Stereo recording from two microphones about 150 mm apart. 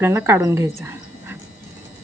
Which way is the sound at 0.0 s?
15° right (ahead or behind).